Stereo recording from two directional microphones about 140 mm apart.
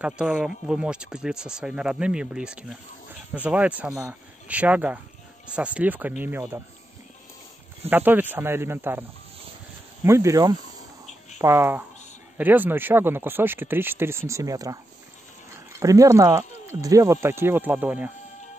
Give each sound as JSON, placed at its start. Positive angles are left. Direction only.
{"t": 0.0, "sound": "speech", "side_deg": -5}
{"t": 7.9, "sound": "speech", "side_deg": -15}
{"t": 10.0, "sound": "speech", "side_deg": -20}